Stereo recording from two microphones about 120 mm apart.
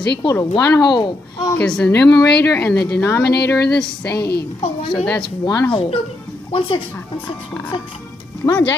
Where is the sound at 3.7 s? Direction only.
10° left (ahead or behind).